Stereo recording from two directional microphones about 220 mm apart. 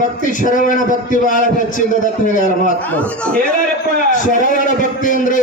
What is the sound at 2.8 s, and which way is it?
Speech, 5° left (ahead or behind).